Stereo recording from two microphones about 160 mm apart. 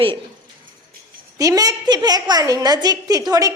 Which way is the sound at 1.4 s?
20° right (ahead or behind).